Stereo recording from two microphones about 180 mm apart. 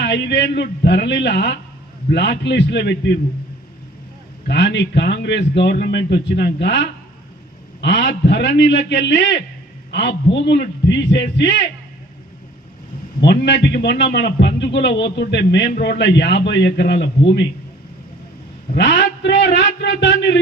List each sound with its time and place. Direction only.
0.0 s a man's voice: 70° left (ahead or behind)
4.4 s a man's voice: 70° left (ahead or behind)
13.2 s a man's voice: 70° left (ahead or behind)
15.7 s a man's voice: 65° left (ahead or behind)
18.8 s a man's voice: 80° left